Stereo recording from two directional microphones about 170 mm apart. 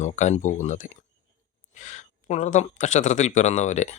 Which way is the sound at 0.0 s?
45° left (ahead or behind).